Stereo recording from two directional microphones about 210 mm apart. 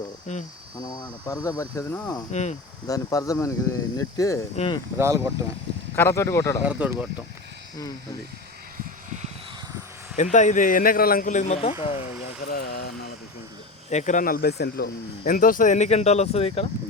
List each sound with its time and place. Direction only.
0.8 s speech: 20° left (ahead or behind)
2.3 s speech: 35° left (ahead or behind)
2.8 s speech: 15° left (ahead or behind)
4.5 s speech: 25° left (ahead or behind)
4.9 s speech: 15° right (ahead or behind)
6.0 s speech: 15° left (ahead or behind)
6.6 s speech: 5° right (ahead or behind)
8.8 s a sound: 35° right (ahead or behind)
10.3 s speech: 35° left (ahead or behind)
12.2 s vehicle: 45° left (ahead or behind)
13.9 s speech: 35° left (ahead or behind)